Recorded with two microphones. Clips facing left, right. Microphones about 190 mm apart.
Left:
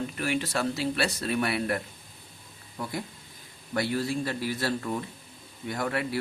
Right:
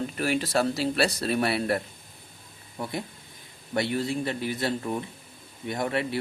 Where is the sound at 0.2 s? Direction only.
35° right (ahead or behind).